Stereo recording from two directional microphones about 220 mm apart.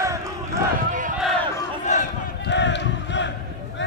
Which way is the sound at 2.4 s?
55° left (ahead or behind).